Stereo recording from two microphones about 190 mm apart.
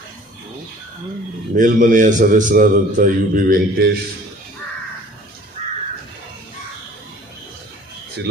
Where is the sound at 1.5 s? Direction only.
45° right (ahead or behind).